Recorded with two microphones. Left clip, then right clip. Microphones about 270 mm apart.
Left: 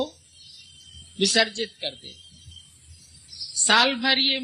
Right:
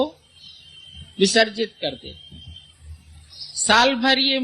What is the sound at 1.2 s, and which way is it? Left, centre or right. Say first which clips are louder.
Speech: right 4 dB; left.